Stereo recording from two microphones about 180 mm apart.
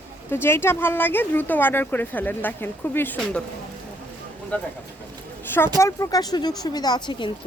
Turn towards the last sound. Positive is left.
turn(degrees=25)  # may be behind; listen again after turning